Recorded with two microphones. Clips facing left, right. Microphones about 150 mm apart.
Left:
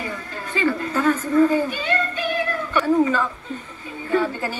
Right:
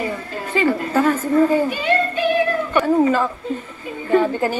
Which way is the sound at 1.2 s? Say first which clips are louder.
Right 2 dB; 30° right (ahead or behind).